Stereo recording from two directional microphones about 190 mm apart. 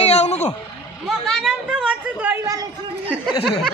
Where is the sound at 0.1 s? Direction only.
35° left (ahead or behind).